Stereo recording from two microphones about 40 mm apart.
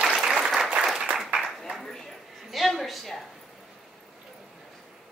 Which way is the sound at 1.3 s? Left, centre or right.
Right.